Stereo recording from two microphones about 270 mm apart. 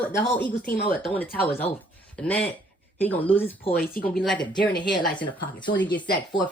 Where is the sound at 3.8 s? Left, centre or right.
Left.